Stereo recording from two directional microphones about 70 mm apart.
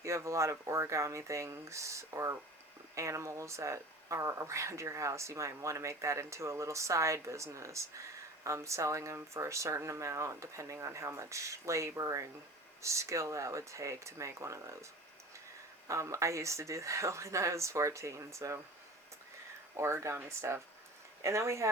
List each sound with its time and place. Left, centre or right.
0.0 s speech: right
15.9 s speech: right
19.7 s speech: right